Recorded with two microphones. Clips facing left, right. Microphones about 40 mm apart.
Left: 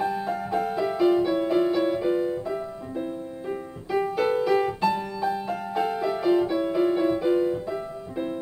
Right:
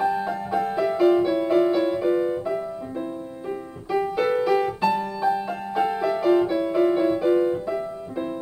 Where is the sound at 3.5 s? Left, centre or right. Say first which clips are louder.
Right 2 dB; centre.